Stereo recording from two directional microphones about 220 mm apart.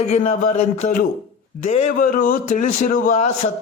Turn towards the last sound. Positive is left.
turn(degrees=30)  # may be behind; listen again after turning